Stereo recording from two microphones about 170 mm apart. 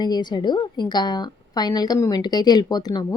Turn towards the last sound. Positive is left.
turn(degrees=25)  # may be behind; listen again after turning